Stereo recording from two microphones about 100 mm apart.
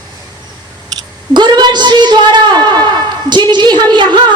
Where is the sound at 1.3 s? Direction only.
45° right (ahead or behind).